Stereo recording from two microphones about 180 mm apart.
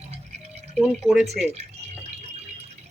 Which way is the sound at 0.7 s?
Centre (ahead or behind).